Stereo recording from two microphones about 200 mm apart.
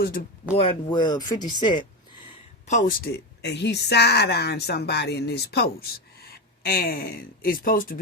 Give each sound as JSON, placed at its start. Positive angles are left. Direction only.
{"t": 0.0, "sound": "speech", "side_deg": 45}
{"t": 0.5, "sound": "speech", "side_deg": 25}
{"t": 2.6, "sound": "speech", "side_deg": 40}